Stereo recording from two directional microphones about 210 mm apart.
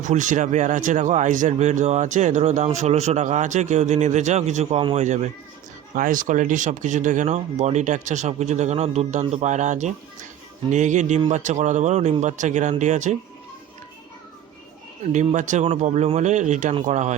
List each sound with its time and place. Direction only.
0.0 s speech: 35° right (ahead or behind)
15.1 s speech: 35° right (ahead or behind)